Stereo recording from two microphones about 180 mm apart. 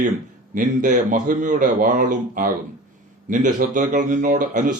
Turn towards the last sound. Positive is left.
turn(degrees=-45)  # may be behind; listen again after turning